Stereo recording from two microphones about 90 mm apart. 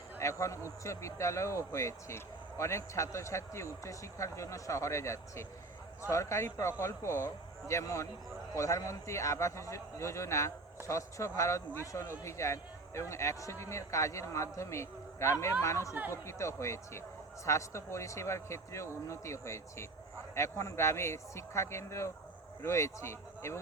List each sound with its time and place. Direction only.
0.2 s speech: 35° left (ahead or behind)